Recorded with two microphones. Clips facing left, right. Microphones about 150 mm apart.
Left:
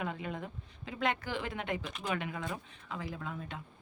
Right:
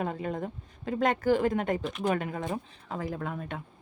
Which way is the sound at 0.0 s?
40° right (ahead or behind).